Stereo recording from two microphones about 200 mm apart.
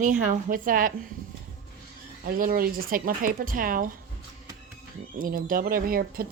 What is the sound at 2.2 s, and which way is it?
Speech, 45° right (ahead or behind).